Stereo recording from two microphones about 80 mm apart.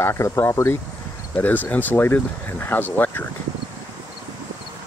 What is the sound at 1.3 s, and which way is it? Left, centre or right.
Speech, left.